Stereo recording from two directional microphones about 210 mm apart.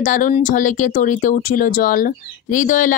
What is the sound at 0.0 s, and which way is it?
Speech, 35° left (ahead or behind).